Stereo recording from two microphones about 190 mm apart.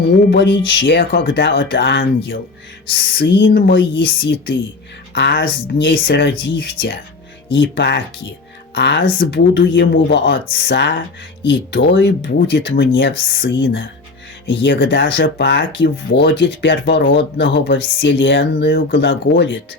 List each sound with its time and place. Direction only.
0.3 s speech: 70° left (ahead or behind)
19.2 s speech: 65° left (ahead or behind)